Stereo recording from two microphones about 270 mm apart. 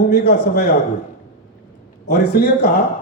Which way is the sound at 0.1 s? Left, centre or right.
Left.